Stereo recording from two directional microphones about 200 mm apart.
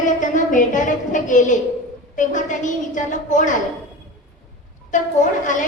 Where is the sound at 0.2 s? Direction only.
40° left (ahead or behind).